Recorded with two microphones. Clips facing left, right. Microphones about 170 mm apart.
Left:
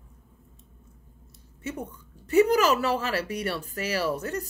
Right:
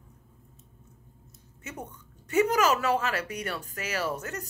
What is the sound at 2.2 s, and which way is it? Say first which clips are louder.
A woman's voice: left 4 dB; 35° left (ahead or behind).